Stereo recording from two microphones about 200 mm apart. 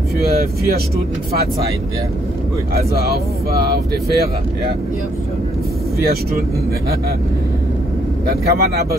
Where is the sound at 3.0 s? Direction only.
50° right (ahead or behind).